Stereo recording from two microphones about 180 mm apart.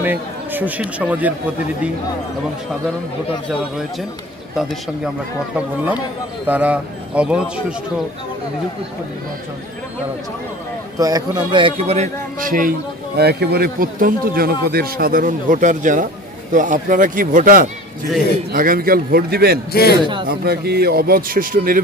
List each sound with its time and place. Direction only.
0.0 s speech: 10° right (ahead or behind)
6.4 s a man's voice: 10° right (ahead or behind)
11.0 s speech: 20° right (ahead or behind); by 12.1 s 35° right (ahead or behind)
12.4 s a man's voice: 50° right (ahead or behind)
19.7 s a man's voice: 60° left (ahead or behind)
20.2 s a man's voice: 60° right (ahead or behind)